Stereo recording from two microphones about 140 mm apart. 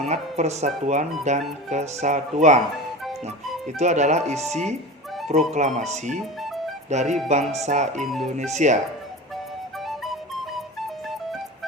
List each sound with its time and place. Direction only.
0.0 s speech: 55° right (ahead or behind)
3.8 s speech: 55° right (ahead or behind)
9.8 s flute: centre (ahead or behind)